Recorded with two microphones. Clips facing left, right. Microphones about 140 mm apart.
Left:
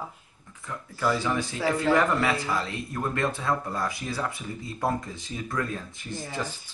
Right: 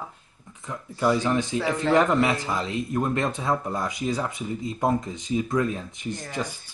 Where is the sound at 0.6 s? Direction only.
20° right (ahead or behind).